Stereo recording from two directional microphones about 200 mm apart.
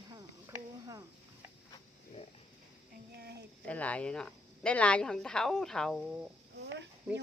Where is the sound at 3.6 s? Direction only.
5° left (ahead or behind).